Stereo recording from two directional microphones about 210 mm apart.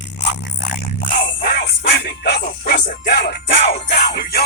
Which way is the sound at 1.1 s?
45° left (ahead or behind).